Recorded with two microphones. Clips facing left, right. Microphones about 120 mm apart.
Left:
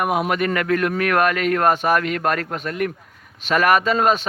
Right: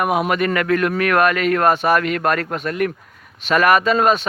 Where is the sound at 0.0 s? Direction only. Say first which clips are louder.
Right 2 dB; 90° right.